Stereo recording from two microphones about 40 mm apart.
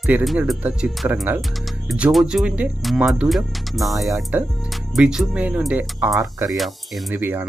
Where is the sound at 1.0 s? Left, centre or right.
Right.